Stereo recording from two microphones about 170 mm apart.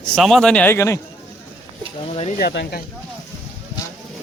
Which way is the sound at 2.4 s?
80° left.